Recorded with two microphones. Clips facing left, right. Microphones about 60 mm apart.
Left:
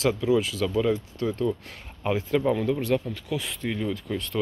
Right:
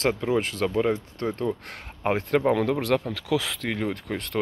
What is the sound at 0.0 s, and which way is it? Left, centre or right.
Speech, right.